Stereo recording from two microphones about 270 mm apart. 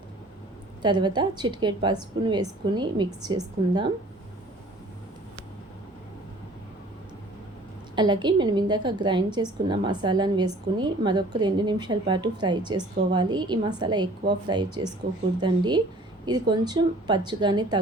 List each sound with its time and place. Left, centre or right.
0.8 s a woman's voice: centre
7.9 s a woman's voice: centre